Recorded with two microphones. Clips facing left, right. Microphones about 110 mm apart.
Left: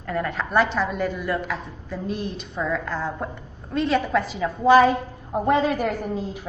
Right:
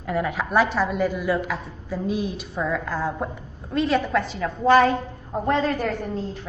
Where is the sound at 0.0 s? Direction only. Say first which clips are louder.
Right 1 dB; 5° right (ahead or behind).